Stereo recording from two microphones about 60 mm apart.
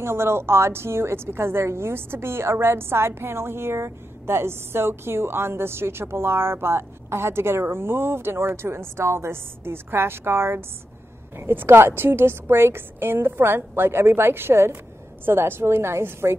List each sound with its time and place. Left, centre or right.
0.0 s a woman's voice: right